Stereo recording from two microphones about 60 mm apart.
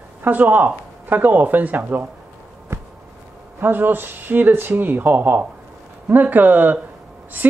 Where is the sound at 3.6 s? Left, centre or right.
Right.